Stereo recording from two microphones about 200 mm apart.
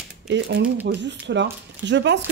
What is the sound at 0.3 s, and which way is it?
Speech, 65° right (ahead or behind).